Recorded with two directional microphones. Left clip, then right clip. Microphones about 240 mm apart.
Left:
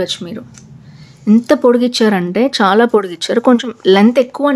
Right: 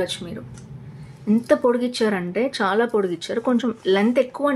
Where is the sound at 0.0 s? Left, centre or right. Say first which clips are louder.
Left 7 dB; left.